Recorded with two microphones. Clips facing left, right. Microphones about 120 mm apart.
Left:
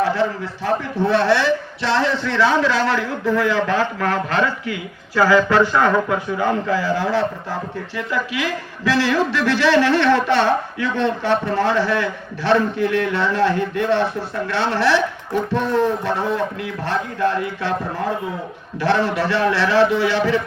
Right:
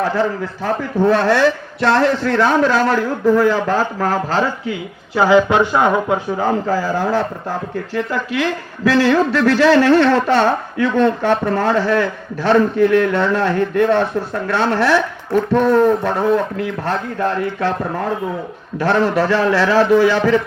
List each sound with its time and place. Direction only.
0.0 s a man's voice: 45° right (ahead or behind); by 6.1 s 20° right (ahead or behind)
6.2 s a man's voice: 40° right (ahead or behind)
18.8 s a man's voice: 45° right (ahead or behind)